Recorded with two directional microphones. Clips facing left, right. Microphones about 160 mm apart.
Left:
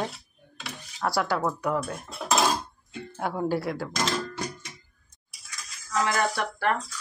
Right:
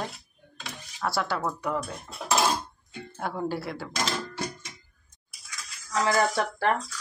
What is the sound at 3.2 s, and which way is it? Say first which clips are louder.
Speech: left 3 dB; 10° left (ahead or behind).